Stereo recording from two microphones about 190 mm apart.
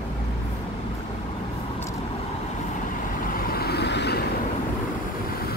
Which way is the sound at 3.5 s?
55° left (ahead or behind).